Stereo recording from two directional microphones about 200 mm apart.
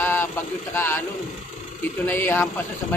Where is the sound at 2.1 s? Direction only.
10° left (ahead or behind).